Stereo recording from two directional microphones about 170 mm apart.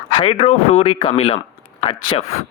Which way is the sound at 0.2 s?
35° left (ahead or behind).